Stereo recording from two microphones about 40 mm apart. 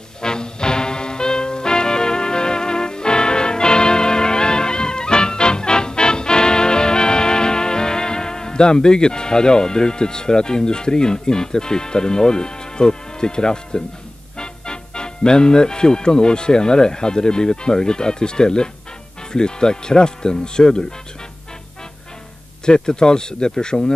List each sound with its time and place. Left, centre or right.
0.2 s music: centre
14.4 s speech: left
22.7 s speech: centre